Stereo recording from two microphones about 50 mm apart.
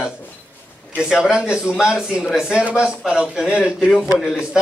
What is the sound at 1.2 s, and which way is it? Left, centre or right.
A man's voice, centre.